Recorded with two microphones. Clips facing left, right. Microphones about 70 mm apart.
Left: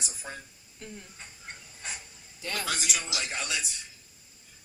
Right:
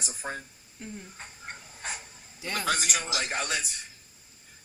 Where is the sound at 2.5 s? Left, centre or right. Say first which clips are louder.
Right 4 dB; right.